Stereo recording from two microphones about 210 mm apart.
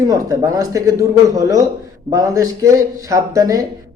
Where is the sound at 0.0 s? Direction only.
15° right (ahead or behind).